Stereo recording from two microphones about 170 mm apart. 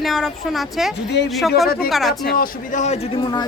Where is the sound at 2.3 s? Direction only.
45° left (ahead or behind).